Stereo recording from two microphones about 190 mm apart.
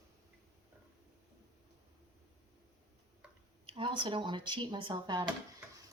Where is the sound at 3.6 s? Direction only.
25° right (ahead or behind).